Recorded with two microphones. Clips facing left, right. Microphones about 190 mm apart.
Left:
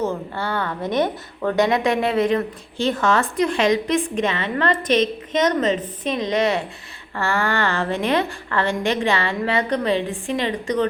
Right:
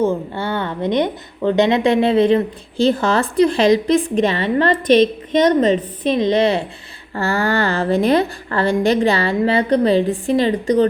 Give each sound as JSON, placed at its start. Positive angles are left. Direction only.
{"t": 0.0, "sound": "a woman's voice", "side_deg": -25}